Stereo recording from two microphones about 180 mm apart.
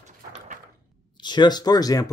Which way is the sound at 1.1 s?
25° left (ahead or behind).